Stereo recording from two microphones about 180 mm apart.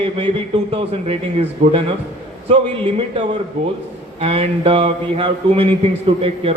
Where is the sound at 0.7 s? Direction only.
30° right (ahead or behind).